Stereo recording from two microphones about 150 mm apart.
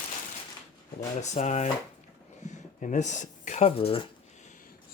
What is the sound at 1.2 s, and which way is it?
Speech, 50° left (ahead or behind).